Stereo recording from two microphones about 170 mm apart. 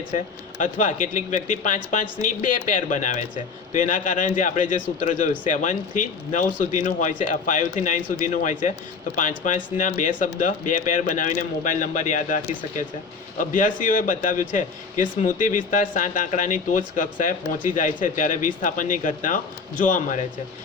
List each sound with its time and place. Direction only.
0.1 s speech: 45° left (ahead or behind)